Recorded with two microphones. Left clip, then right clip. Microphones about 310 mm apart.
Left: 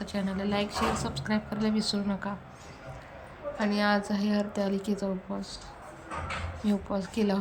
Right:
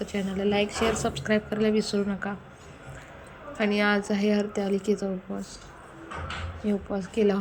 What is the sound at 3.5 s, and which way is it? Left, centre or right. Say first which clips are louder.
Speech: right 3 dB; centre.